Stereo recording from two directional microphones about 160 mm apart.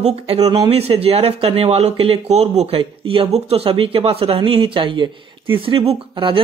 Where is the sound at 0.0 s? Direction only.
40° right (ahead or behind).